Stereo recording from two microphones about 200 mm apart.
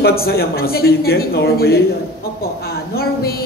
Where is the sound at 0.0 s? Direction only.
50° left (ahead or behind).